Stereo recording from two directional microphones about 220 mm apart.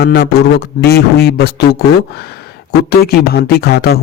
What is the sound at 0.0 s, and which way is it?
Speech, 50° left (ahead or behind).